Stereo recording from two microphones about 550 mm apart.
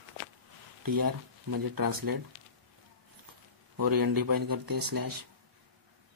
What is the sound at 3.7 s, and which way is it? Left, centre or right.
Speech, right.